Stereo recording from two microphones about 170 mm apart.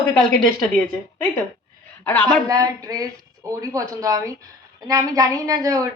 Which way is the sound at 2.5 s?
20° right (ahead or behind).